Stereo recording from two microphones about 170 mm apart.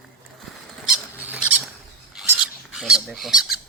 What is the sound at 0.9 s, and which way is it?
Rodents, 5° right (ahead or behind).